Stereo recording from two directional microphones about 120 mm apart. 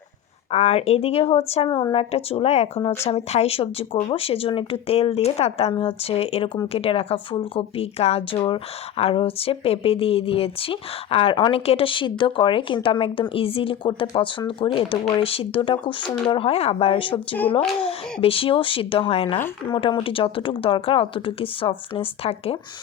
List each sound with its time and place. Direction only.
0.5 s a woman's voice: 55° left (ahead or behind)
1.6 s a woman's voice: 40° left (ahead or behind); by 8.4 s 60° left (ahead or behind)
8.4 s speech: 45° left (ahead or behind)